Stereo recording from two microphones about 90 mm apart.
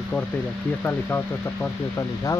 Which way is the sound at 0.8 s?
25° left (ahead or behind).